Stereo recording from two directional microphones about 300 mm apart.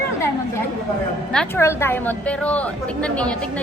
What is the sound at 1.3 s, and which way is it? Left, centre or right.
A woman's voice, centre.